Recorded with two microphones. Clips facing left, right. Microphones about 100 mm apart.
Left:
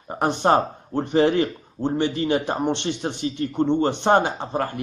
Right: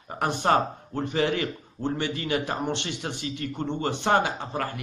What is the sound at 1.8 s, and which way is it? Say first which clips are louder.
A man's voice: left 6 dB; 20° left (ahead or behind).